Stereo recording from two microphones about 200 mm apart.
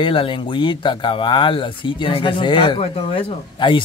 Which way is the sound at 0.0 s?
25° left (ahead or behind).